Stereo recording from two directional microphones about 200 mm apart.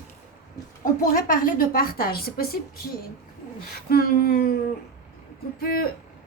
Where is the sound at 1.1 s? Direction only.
45° left (ahead or behind).